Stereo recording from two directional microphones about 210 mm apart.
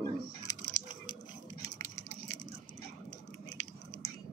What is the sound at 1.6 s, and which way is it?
Patter, 15° left (ahead or behind).